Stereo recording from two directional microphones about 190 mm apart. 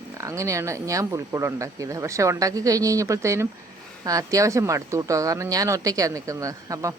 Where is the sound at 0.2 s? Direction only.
15° right (ahead or behind).